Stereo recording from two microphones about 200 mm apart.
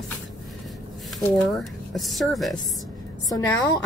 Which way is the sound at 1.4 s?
Centre (ahead or behind).